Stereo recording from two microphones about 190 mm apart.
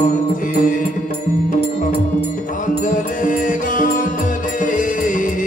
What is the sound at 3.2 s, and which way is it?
Music, 45° left (ahead or behind).